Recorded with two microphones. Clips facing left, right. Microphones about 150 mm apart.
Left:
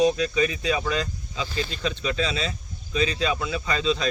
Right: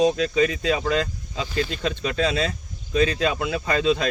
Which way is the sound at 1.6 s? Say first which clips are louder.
Right 4 dB; 50° right (ahead or behind).